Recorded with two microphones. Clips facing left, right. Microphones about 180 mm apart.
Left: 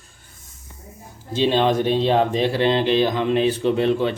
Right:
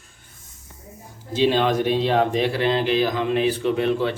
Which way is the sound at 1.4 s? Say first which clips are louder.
Left 1 dB; 25° left (ahead or behind).